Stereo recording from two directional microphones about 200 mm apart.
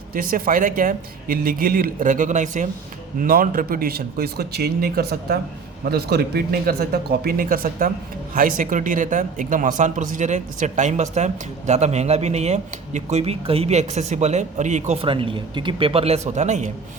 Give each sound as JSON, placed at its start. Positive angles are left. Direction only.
{"t": 0.1, "sound": "speech", "side_deg": -45}